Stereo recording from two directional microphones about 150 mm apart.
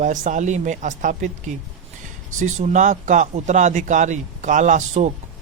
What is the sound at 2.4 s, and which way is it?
Speech, 55° right (ahead or behind).